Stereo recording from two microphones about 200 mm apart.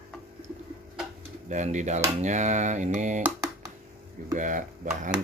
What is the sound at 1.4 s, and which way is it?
Speech, 35° right (ahead or behind).